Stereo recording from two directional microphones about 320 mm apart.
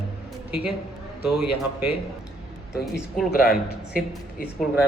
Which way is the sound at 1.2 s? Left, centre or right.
Left.